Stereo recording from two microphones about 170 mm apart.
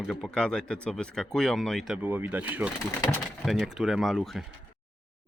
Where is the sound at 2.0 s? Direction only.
10° right (ahead or behind).